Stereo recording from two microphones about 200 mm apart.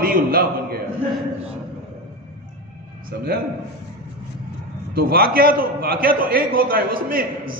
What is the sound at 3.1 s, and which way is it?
Speech, 55° right (ahead or behind).